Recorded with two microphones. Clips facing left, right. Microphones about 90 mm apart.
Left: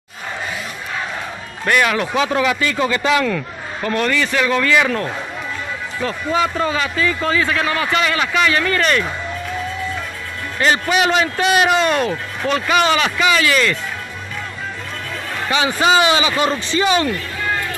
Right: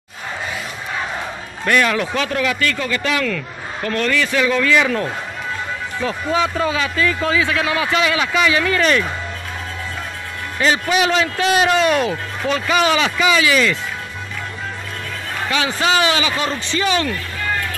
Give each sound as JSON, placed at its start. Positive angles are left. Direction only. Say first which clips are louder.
{"t": 1.7, "sound": "speech", "louder": "even", "side_deg": 10}
{"t": 6.0, "sound": "a man's voice", "louder": "even", "side_deg": 0}
{"t": 10.6, "sound": "a man's voice", "louder": "left 1 dB", "side_deg": 0}
{"t": 15.5, "sound": "speech", "louder": "left 3 dB", "side_deg": 15}